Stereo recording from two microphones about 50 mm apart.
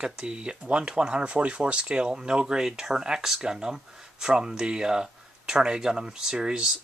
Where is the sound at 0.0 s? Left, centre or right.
Centre.